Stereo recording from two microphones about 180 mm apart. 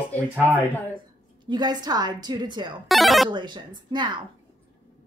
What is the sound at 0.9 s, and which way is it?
A woman's voice, 25° right (ahead or behind).